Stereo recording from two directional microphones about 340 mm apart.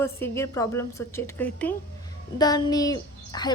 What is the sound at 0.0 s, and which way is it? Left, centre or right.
A woman's voice, centre.